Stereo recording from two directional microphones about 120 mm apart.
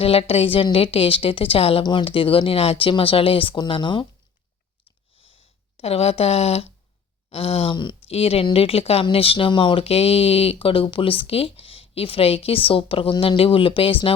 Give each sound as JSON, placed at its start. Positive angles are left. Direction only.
{"t": 0.0, "sound": "speech", "side_deg": 55}
{"t": 1.8, "sound": "speech", "side_deg": 40}
{"t": 5.2, "sound": "a sound", "side_deg": 55}
{"t": 7.3, "sound": "speech", "side_deg": 55}
{"t": 8.0, "sound": "speech", "side_deg": 55}